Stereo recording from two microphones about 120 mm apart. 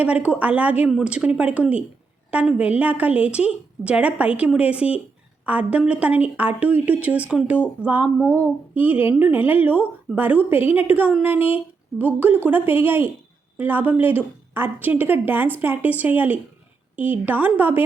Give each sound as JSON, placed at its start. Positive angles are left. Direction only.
{"t": 0.0, "sound": "a woman's voice", "side_deg": -10}